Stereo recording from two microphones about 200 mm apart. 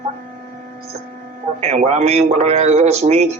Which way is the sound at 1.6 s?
35° right (ahead or behind).